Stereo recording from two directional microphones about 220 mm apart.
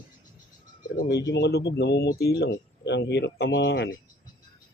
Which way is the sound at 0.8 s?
45° left (ahead or behind).